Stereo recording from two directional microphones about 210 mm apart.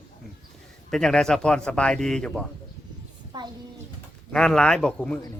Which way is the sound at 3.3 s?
20° right (ahead or behind).